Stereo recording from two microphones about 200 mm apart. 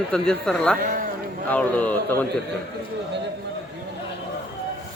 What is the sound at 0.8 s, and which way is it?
Speech, 45° right (ahead or behind).